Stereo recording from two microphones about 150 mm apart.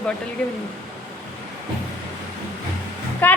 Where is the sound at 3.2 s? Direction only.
10° left (ahead or behind).